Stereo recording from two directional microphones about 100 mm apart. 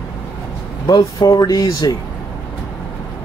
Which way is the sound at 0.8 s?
45° left (ahead or behind).